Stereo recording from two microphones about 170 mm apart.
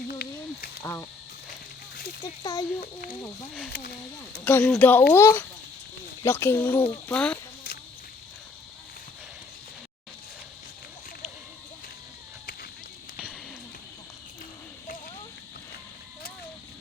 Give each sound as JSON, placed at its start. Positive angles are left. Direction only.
{"t": 0.1, "sound": "a sound", "side_deg": 65}
{"t": 0.8, "sound": "speech", "side_deg": 15}
{"t": 2.2, "sound": "speech", "side_deg": 20}
{"t": 3.7, "sound": "speech", "side_deg": 70}
{"t": 4.4, "sound": "speech", "side_deg": 5}